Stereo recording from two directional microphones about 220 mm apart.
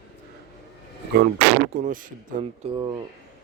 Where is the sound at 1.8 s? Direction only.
35° right (ahead or behind).